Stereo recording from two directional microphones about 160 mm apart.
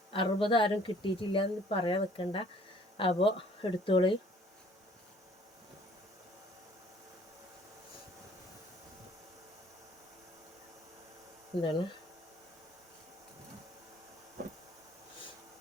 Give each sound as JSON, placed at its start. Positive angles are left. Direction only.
{"t": 0.1, "sound": "a woman's voice", "side_deg": 35}
{"t": 11.5, "sound": "a woman's voice", "side_deg": 35}